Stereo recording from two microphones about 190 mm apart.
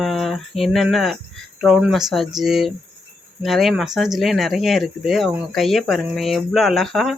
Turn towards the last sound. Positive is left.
turn(degrees=0)  # may be behind; listen again after turning